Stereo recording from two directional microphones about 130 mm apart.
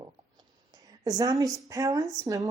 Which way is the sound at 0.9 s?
30° right (ahead or behind).